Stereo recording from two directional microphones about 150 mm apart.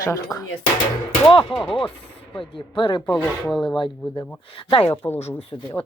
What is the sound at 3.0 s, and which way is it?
Speech, 10° left (ahead or behind).